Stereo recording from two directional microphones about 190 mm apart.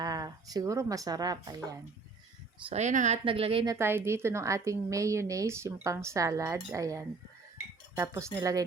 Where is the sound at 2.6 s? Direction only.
35° right (ahead or behind).